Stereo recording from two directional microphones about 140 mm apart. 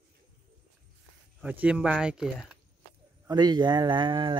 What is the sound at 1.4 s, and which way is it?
Speech, 10° right (ahead or behind).